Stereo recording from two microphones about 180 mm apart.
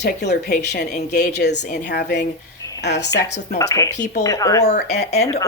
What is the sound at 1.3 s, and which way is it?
Speech, 70° left (ahead or behind).